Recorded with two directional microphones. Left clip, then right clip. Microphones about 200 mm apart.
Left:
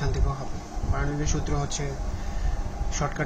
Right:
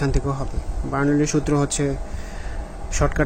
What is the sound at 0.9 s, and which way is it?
Speech, 55° right (ahead or behind).